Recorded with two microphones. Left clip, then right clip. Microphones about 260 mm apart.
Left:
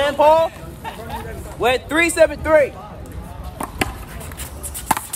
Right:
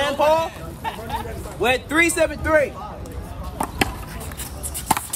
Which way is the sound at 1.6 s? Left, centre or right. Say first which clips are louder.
Left 1 dB; left.